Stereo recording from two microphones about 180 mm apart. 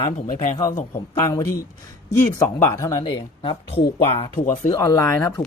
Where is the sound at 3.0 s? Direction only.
30° left (ahead or behind).